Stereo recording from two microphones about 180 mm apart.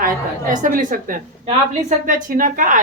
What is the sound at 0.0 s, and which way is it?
A woman's voice, 45° right (ahead or behind).